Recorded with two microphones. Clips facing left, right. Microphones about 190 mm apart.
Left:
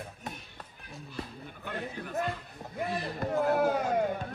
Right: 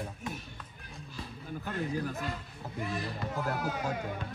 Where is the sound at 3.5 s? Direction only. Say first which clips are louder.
Left 7 dB; 55° left (ahead or behind).